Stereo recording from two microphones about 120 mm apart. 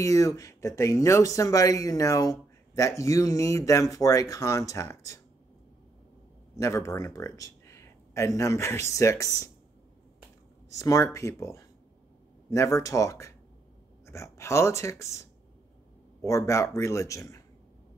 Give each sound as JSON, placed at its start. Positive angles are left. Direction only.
{"t": 0.0, "sound": "speech", "side_deg": 25}
{"t": 6.6, "sound": "speech", "side_deg": 25}
{"t": 10.7, "sound": "speech", "side_deg": 25}
{"t": 16.3, "sound": "speech", "side_deg": 25}